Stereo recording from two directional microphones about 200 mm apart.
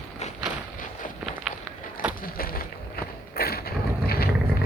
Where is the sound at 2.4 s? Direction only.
45° left (ahead or behind).